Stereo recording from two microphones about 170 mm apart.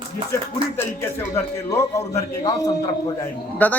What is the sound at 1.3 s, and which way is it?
A man's voice, 15° left (ahead or behind).